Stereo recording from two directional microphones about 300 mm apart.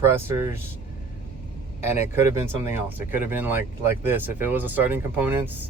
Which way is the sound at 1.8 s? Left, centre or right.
Centre.